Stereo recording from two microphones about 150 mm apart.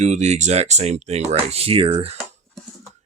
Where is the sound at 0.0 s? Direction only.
50° right (ahead or behind).